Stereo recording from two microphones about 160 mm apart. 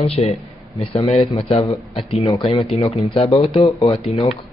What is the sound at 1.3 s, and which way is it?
Speech, 40° left (ahead or behind).